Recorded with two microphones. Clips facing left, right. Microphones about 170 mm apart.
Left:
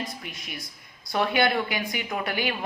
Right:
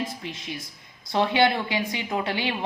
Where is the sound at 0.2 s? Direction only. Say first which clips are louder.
Right 4 dB; 25° right (ahead or behind).